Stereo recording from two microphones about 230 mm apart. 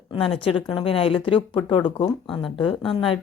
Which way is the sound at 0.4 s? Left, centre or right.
Left.